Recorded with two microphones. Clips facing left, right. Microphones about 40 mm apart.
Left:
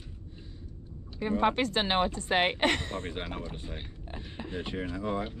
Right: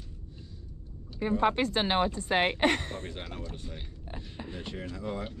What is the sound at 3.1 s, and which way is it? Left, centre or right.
Speech, left.